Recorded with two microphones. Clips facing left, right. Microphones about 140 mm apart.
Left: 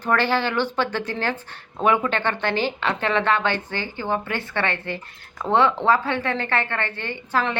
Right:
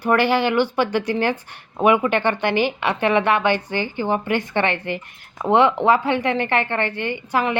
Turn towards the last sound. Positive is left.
turn(degrees=-15)  # may be behind; listen again after turning